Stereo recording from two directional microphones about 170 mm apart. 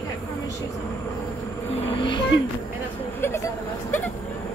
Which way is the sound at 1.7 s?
30° left (ahead or behind).